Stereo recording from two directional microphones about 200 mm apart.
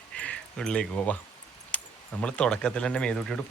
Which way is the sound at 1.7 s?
5° left (ahead or behind).